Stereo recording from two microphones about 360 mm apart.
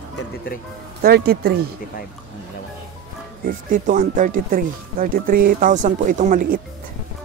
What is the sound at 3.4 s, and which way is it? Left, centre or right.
Speech, right.